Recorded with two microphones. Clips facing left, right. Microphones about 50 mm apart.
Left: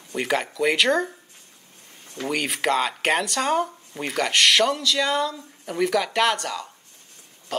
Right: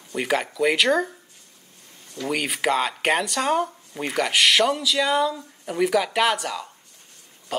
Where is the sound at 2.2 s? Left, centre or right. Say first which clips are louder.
Even; centre.